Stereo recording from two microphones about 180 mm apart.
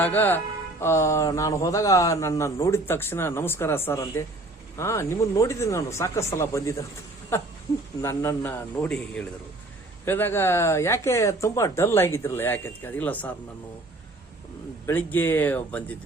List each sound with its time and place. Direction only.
0.0 s speech: 10° left (ahead or behind)
8.0 s speech: 15° left (ahead or behind)
14.8 s speech: 10° left (ahead or behind)